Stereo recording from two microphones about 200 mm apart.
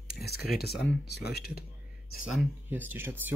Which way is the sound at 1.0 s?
55° left (ahead or behind).